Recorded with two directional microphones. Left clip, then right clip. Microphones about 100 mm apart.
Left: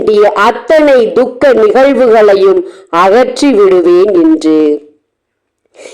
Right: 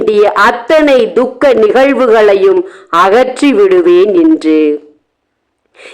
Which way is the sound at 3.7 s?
20° left (ahead or behind).